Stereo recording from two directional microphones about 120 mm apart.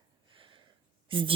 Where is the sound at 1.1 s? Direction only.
45° right (ahead or behind).